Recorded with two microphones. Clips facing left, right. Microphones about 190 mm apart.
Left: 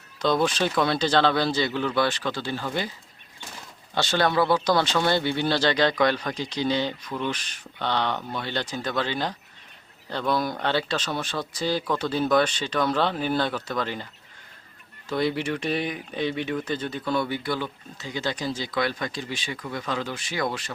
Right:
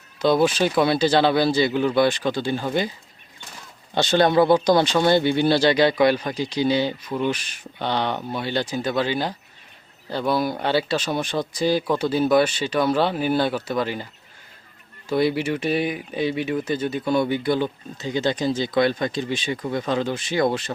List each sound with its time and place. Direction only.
0.2 s speech: 5° right (ahead or behind)
3.9 s speech: 20° right (ahead or behind)
15.1 s speech: 10° right (ahead or behind); by 20.7 s 25° right (ahead or behind)